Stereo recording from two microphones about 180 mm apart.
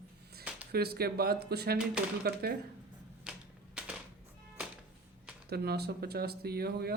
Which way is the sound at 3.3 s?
5° right (ahead or behind).